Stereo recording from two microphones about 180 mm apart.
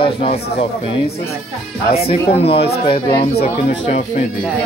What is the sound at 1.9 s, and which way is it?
Speech, 35° left (ahead or behind).